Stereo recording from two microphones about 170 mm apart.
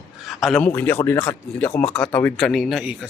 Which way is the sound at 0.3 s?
Centre (ahead or behind).